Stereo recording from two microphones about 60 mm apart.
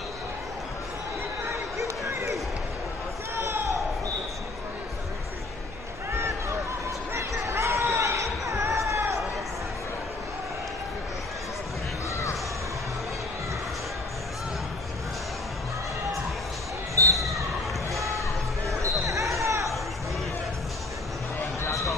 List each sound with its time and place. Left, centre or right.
1.4 s basketball bounce: right
3.3 s a sound: right
7.2 s a sound: right
16.9 s basketball bounce: right
18.7 s basketball bounce: right
21.6 s basketball bounce: left